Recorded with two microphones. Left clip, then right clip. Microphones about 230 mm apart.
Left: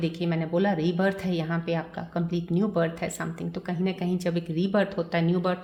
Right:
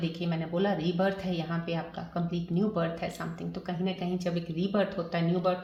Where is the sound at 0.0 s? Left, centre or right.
Left.